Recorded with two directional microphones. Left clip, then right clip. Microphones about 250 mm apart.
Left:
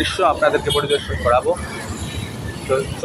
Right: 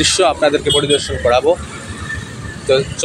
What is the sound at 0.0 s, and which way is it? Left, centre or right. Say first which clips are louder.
Speech: right 3 dB; right.